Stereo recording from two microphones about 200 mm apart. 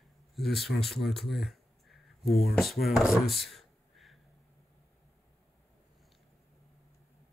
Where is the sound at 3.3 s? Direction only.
Centre (ahead or behind).